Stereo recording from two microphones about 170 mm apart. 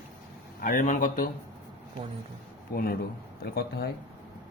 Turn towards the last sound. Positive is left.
turn(degrees=65)  # may be behind; listen again after turning